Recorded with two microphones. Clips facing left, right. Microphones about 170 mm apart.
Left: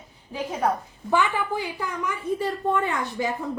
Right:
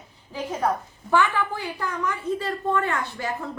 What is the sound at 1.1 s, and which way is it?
A woman's voice, 15° left (ahead or behind).